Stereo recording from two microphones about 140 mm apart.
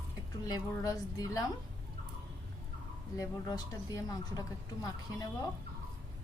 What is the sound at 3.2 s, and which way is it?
Speech, 25° left (ahead or behind).